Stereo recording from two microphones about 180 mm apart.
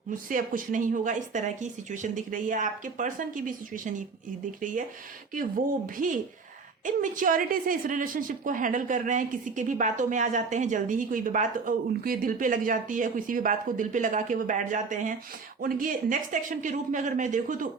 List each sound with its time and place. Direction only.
0.1 s a woman's voice: 50° right (ahead or behind)
5.3 s a woman's voice: 50° right (ahead or behind)